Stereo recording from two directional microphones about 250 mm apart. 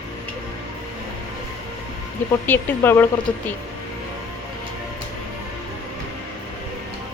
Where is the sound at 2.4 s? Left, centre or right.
Centre.